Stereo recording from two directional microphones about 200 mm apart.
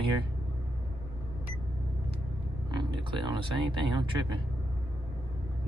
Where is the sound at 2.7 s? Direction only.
25° right (ahead or behind).